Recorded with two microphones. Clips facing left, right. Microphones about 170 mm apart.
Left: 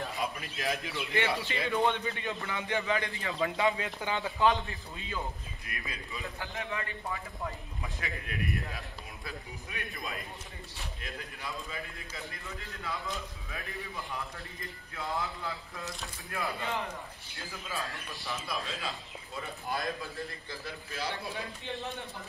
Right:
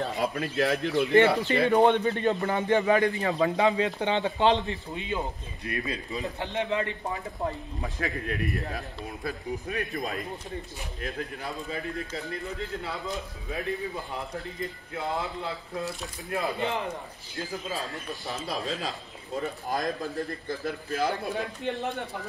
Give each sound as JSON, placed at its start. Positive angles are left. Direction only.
{"t": 0.1, "sound": "speech", "side_deg": -65}
{"t": 2.0, "sound": "a man's voice", "side_deg": -40}
{"t": 3.6, "sound": "speech", "side_deg": -20}
{"t": 5.7, "sound": "a man's voice", "side_deg": -35}
{"t": 6.4, "sound": "speech", "side_deg": -20}
{"t": 7.1, "sound": "a man's voice", "side_deg": -40}
{"t": 13.0, "sound": "speech", "side_deg": -20}
{"t": 15.1, "sound": "speech", "side_deg": -25}
{"t": 17.4, "sound": "a man's voice", "side_deg": -40}
{"t": 20.9, "sound": "speech", "side_deg": -55}